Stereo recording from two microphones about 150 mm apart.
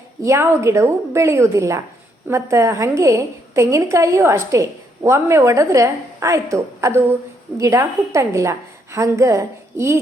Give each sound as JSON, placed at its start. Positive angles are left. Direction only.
{"t": 0.3, "sound": "a woman's voice", "side_deg": -20}